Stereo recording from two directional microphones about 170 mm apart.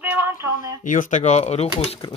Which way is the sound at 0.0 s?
10° right (ahead or behind).